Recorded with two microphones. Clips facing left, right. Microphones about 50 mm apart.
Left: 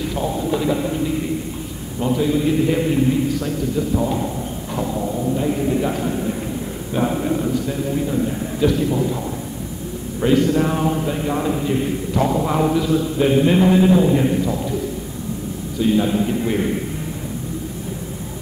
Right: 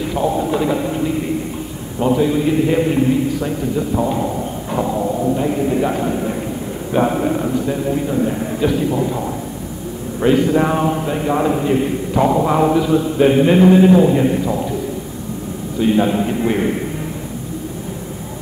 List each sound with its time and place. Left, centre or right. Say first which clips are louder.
0.0 s a man's voice: right 4 dB; centre
10.2 s a man's voice: right 2 dB; centre
15.8 s a man's voice: right 2 dB; centre